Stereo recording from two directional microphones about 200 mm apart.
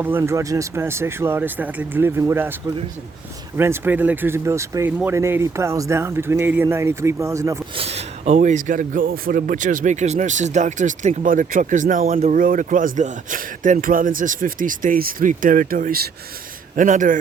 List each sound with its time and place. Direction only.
0.0 s speech: 10° right (ahead or behind)
3.6 s speech: 10° right (ahead or behind)
7.8 s a man's voice: 30° right (ahead or behind)